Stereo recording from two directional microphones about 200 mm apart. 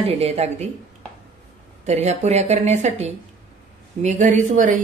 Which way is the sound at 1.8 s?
35° right (ahead or behind).